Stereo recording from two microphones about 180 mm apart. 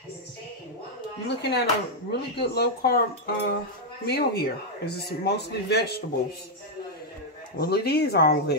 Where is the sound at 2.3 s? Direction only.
65° left (ahead or behind).